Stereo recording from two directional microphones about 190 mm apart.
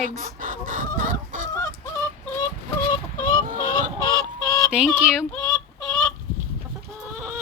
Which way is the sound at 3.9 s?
20° right (ahead or behind).